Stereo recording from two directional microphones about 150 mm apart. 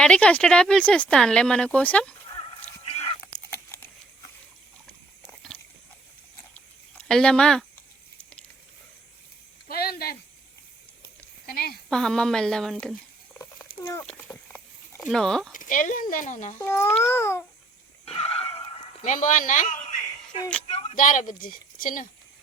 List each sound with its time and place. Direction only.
0.0 s speech: 5° left (ahead or behind)
2.3 s a sound: 40° left (ahead or behind)
5.2 s biting: 5° left (ahead or behind)
7.0 s speech: 5° left (ahead or behind)
9.6 s speech: 90° left
11.4 s a woman's voice: 90° left
11.9 s speech: 5° left (ahead or behind)
13.7 s a sound: 30° left (ahead or behind)
14.1 s a sound: 15° left (ahead or behind)
15.1 s speech: 5° left (ahead or behind)
15.5 s speech: 60° left (ahead or behind)
16.6 s speech: 15° left (ahead or behind)
18.0 s a sound: 40° left (ahead or behind)
19.0 s speech: 60° left (ahead or behind)